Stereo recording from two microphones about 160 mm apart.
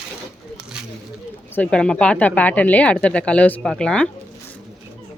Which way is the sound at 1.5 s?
5° left (ahead or behind).